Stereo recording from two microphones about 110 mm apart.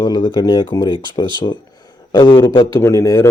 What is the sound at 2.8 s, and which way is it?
Speech, 30° left (ahead or behind).